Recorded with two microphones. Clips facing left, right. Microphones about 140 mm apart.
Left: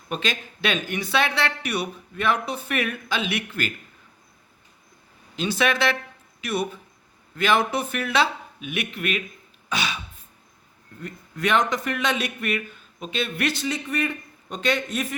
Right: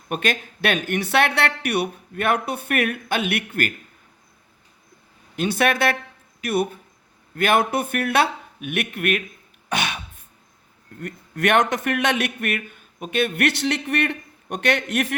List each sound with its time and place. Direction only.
0.1 s a man's voice: 55° right (ahead or behind)
5.4 s a man's voice: 55° right (ahead or behind)
9.6 s throat clearing: 60° right (ahead or behind)
11.0 s a man's voice: 65° right (ahead or behind)